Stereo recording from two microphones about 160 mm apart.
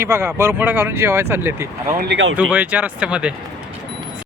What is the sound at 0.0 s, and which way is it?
Speech, 15° right (ahead or behind).